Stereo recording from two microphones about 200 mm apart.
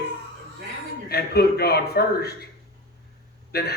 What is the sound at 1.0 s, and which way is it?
A man's voice, 50° left (ahead or behind).